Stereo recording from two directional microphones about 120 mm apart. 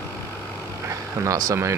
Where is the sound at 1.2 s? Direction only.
30° right (ahead or behind).